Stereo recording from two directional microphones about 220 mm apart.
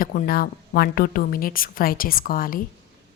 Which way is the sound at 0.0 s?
40° left (ahead or behind).